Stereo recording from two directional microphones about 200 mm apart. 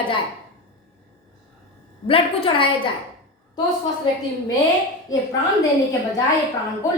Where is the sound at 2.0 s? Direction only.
25° left (ahead or behind).